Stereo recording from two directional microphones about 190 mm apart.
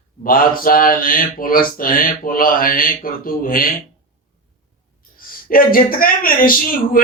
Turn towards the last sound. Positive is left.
turn(degrees=50)  # may be behind; listen again after turning